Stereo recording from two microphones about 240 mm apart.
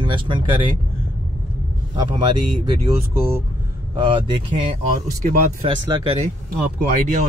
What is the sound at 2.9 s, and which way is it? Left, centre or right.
Speech, centre.